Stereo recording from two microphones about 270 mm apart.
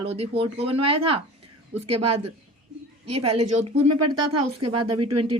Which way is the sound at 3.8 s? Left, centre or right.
Right.